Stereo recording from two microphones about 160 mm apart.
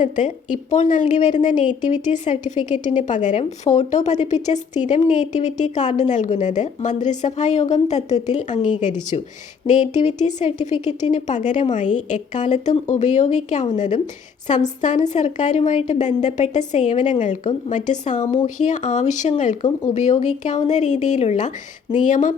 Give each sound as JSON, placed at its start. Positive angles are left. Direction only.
{"t": 0.0, "sound": "a woman's voice", "side_deg": 50}